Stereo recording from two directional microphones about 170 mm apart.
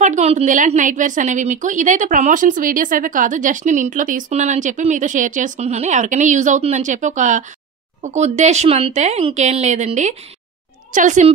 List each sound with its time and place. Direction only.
0.0 s a woman's voice: 40° right (ahead or behind)